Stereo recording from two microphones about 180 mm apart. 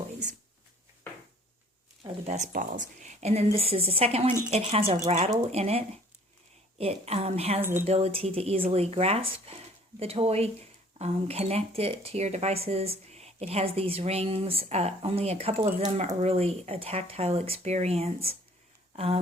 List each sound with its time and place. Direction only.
2.2 s speech: 40° right (ahead or behind)
7.6 s speech: 10° right (ahead or behind)
7.9 s speech: 35° right (ahead or behind)